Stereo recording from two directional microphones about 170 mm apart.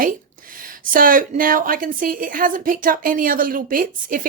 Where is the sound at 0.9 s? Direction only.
55° right (ahead or behind).